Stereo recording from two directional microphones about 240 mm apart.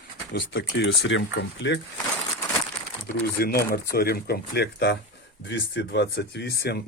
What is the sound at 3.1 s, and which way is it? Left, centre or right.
Speech, left.